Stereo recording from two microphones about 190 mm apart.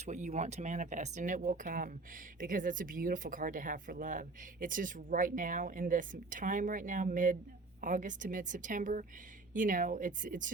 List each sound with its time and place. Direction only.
0.0 s speech: 35° right (ahead or behind)